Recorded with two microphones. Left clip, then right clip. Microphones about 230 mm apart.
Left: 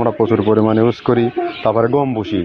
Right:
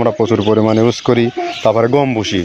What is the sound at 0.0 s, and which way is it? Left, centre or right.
Speech, right.